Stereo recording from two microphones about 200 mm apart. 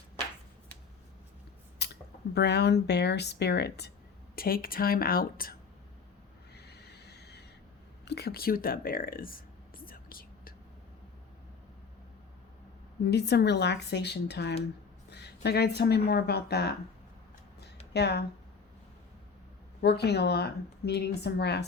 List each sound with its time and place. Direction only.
1.8 s speech: 55° left (ahead or behind)
6.5 s owl: 55° left (ahead or behind)
8.0 s a sound: 55° left (ahead or behind)
13.1 s a woman's voice: 55° left (ahead or behind)
17.9 s a woman's voice: 55° left (ahead or behind)
20.0 s a woman's voice: 55° left (ahead or behind)